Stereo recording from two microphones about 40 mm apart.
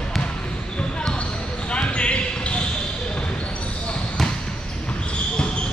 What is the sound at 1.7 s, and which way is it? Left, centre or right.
Basketball bounce, left.